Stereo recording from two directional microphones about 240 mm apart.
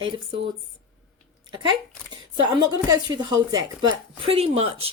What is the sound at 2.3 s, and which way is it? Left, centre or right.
Speech, centre.